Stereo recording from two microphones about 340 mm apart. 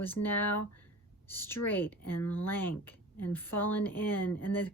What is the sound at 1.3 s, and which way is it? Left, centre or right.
Speech, centre.